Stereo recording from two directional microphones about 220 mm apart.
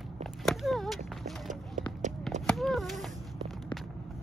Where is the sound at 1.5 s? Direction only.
35° right (ahead or behind).